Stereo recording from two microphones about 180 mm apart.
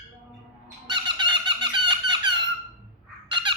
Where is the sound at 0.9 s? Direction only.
25° right (ahead or behind).